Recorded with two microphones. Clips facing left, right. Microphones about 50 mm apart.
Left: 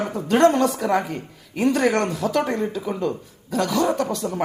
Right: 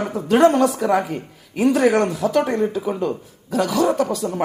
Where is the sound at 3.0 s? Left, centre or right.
Centre.